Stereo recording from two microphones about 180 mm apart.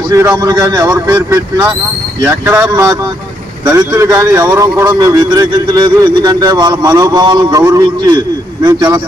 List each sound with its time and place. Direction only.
0.1 s a man's voice: 15° right (ahead or behind)